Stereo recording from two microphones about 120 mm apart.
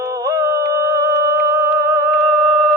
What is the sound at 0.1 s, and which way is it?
Music, 25° right (ahead or behind).